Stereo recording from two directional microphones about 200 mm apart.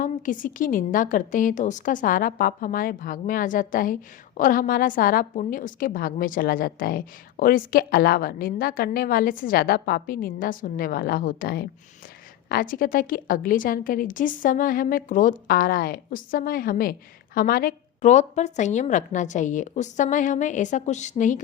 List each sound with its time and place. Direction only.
0.0 s a woman's voice: 40° left (ahead or behind)